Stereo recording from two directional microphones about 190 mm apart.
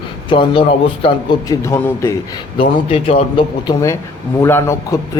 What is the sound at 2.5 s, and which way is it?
A man's voice, 30° left (ahead or behind).